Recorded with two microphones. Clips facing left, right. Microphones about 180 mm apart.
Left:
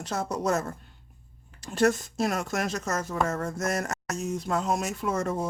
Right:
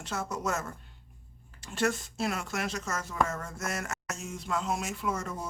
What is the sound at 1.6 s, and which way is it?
Speech, 40° left (ahead or behind).